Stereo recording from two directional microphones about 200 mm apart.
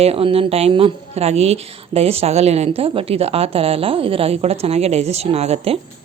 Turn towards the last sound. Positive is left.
turn(degrees=-30)  # may be behind; listen again after turning